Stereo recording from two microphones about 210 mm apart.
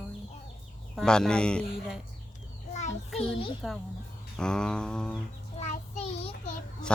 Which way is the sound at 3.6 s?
Centre (ahead or behind).